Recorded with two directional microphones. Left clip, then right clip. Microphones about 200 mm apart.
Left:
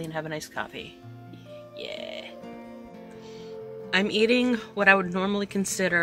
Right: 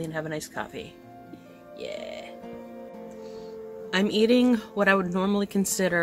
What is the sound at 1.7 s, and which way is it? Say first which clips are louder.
Music: right 1 dB; 10° right (ahead or behind).